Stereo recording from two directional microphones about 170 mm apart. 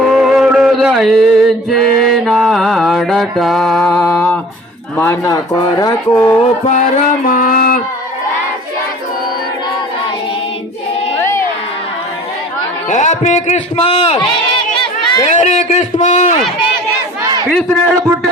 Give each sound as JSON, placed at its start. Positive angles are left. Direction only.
{"t": 0.0, "sound": "music", "side_deg": -5}
{"t": 4.9, "sound": "speech", "side_deg": 15}
{"t": 6.7, "sound": "music", "side_deg": 50}
{"t": 11.2, "sound": "crowd", "side_deg": 15}
{"t": 12.9, "sound": "a man's voice", "side_deg": 45}
{"t": 15.4, "sound": "a sound", "side_deg": 40}
{"t": 17.5, "sound": "a man's voice", "side_deg": 0}